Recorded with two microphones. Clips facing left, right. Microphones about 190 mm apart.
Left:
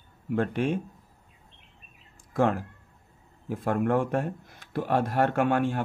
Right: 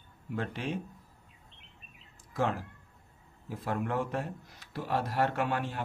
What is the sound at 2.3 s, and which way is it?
A man's voice, 50° left (ahead or behind).